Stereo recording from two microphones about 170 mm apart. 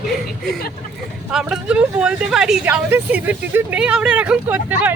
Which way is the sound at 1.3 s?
5° right (ahead or behind).